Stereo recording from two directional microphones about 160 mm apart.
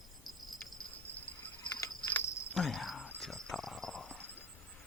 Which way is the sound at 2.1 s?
15° left (ahead or behind).